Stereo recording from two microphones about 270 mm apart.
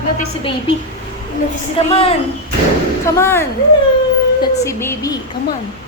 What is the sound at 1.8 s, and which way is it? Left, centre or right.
Speech, left.